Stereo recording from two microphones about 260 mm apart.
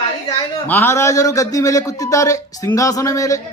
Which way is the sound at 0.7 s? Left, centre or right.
Centre.